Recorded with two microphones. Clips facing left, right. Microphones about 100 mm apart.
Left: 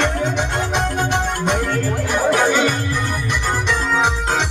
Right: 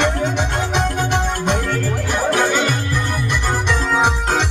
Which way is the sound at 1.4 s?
5° left (ahead or behind).